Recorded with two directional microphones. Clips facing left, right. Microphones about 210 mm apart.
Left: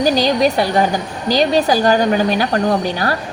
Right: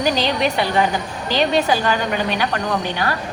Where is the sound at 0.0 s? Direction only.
40° left (ahead or behind).